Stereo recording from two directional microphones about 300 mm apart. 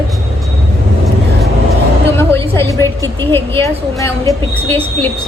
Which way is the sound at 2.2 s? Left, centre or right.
Centre.